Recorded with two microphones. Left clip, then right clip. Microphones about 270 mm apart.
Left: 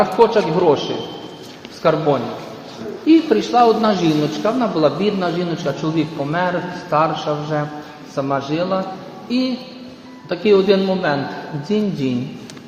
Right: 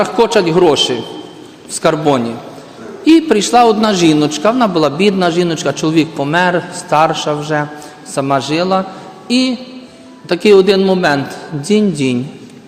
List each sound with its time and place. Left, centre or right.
0.0 s a man's voice: right
1.8 s a man's voice: right
10.2 s a man's voice: right